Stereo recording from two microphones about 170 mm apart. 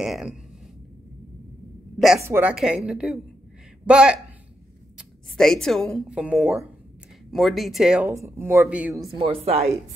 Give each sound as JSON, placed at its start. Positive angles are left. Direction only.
{"t": 0.0, "sound": "speech", "side_deg": 0}
{"t": 2.0, "sound": "a man's voice", "side_deg": 0}
{"t": 2.2, "sound": "speech", "side_deg": -15}
{"t": 8.1, "sound": "speech", "side_deg": -15}
{"t": 8.9, "sound": "speech", "side_deg": -25}